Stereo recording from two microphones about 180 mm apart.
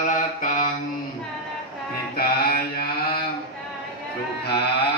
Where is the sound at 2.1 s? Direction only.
55° left (ahead or behind).